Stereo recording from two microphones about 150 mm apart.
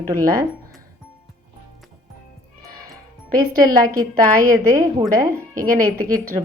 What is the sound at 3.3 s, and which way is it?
Speech, 70° right (ahead or behind).